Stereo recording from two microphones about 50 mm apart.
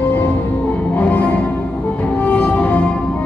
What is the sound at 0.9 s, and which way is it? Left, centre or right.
Music, left.